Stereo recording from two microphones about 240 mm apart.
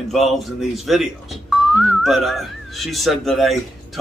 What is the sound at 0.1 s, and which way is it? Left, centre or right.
Speech, centre.